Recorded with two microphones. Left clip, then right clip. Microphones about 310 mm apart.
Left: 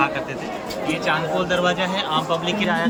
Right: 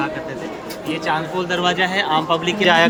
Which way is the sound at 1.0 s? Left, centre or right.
Centre.